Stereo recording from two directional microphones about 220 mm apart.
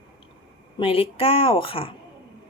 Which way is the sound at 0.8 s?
25° left (ahead or behind).